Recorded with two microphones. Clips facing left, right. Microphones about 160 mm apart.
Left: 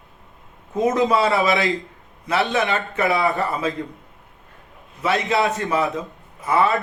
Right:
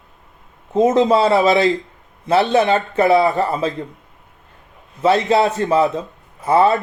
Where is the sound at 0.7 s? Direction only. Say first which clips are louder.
Right 5 dB; 25° right (ahead or behind).